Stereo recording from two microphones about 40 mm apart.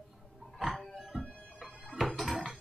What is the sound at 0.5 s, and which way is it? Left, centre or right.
Music, centre.